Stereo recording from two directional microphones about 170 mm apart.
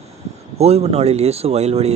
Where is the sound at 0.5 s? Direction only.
40° right (ahead or behind).